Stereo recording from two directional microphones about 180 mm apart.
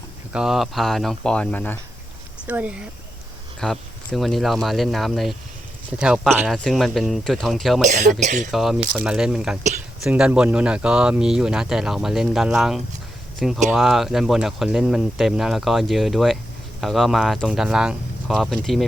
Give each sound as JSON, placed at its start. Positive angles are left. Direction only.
{"t": 0.3, "sound": "speech", "side_deg": 0}
{"t": 2.5, "sound": "speech", "side_deg": -10}
{"t": 7.9, "sound": "speech", "side_deg": -45}
{"t": 9.0, "sound": "speech", "side_deg": -5}